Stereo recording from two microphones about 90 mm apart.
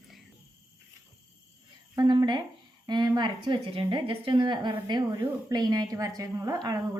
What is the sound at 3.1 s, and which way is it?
A woman's voice, 60° right (ahead or behind).